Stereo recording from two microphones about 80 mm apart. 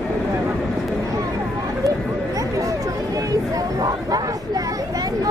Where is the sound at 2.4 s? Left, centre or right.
Right.